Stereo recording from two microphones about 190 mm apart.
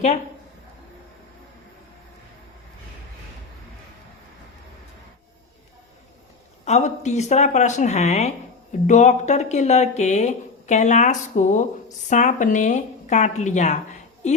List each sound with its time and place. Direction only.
6.7 s speech: 35° left (ahead or behind)